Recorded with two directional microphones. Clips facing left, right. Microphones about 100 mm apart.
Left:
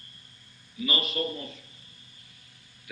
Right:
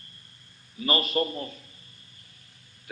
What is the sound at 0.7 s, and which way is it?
Speech, 40° right (ahead or behind).